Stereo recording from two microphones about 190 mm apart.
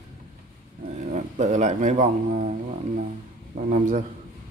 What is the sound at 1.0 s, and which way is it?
A man's voice, 40° right (ahead or behind).